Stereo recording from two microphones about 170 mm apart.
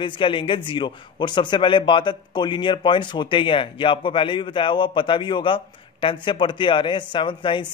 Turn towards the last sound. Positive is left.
turn(degrees=30)  # may be behind; listen again after turning